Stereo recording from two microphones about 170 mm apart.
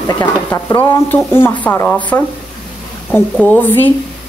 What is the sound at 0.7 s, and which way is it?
Speech, 20° left (ahead or behind).